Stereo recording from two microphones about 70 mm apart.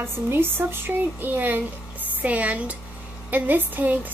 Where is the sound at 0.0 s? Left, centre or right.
Right.